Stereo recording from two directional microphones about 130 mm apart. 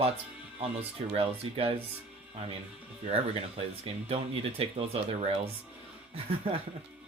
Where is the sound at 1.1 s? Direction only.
45° right (ahead or behind).